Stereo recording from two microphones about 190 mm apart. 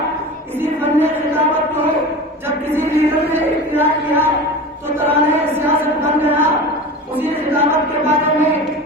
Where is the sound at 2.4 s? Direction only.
10° right (ahead or behind).